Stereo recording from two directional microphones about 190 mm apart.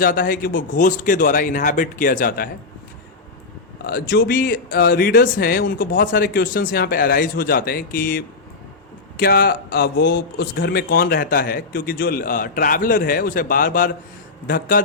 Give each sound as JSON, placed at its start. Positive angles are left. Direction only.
{"t": 0.0, "sound": "speech", "side_deg": 50}
{"t": 3.8, "sound": "speech", "side_deg": 50}